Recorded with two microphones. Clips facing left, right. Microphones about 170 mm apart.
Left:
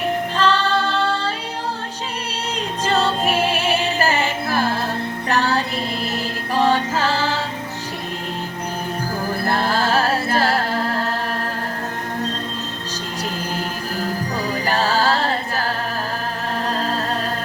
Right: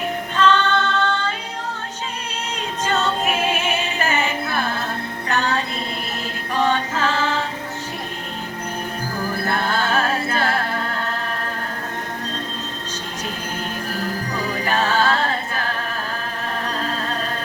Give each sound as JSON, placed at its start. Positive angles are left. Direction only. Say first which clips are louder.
{"t": 0.3, "sound": "female singing", "louder": "right 3 dB", "side_deg": 30}
{"t": 2.8, "sound": "music", "louder": "left 2 dB", "side_deg": 35}
{"t": 9.5, "sound": "music", "louder": "left 3 dB", "side_deg": 35}
{"t": 14.6, "sound": "music", "louder": "even", "side_deg": 35}